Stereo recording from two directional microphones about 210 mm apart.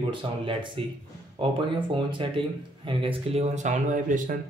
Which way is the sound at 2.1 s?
25° right (ahead or behind).